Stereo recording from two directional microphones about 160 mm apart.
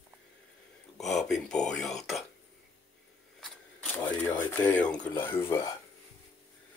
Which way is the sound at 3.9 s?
10° left (ahead or behind).